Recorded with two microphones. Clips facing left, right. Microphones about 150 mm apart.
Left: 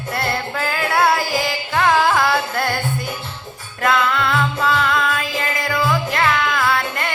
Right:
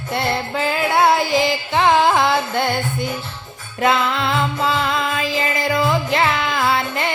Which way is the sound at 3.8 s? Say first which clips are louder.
Even; 25° right (ahead or behind).